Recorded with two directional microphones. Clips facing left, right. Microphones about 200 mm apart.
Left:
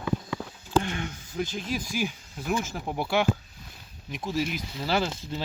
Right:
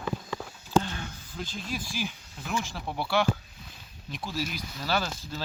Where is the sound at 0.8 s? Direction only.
15° left (ahead or behind).